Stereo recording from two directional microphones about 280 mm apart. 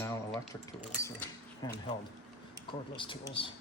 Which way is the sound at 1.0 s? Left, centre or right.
Centre.